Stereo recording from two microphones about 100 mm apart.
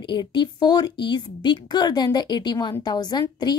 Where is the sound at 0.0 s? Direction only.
50° left (ahead or behind).